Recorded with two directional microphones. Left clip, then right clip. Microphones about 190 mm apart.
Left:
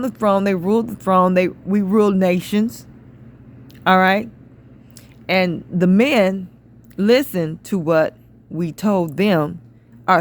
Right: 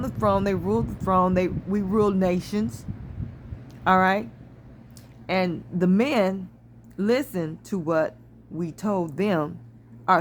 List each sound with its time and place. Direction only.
0.0 s speech: 35° left (ahead or behind)
3.8 s a man's voice: 40° left (ahead or behind)